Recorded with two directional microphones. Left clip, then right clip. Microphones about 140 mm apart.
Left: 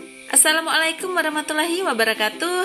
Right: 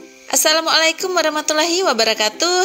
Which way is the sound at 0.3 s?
25° right (ahead or behind).